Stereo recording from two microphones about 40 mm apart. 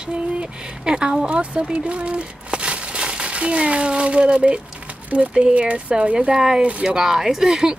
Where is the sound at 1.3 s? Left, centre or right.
Right.